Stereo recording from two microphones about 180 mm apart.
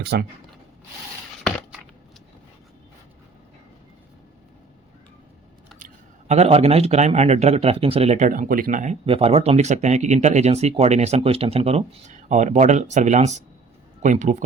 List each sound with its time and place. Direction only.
0.0 s speech: 65° right (ahead or behind)
5.8 s speech: 40° right (ahead or behind)